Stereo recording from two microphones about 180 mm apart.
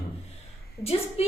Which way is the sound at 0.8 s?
35° left (ahead or behind).